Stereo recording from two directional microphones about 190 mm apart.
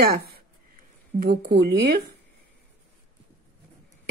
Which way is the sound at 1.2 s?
60° right (ahead or behind).